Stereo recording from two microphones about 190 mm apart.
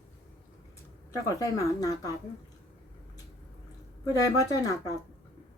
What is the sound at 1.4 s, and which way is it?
Speech, 20° left (ahead or behind).